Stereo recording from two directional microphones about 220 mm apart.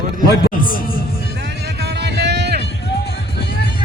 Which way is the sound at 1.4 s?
50° right (ahead or behind).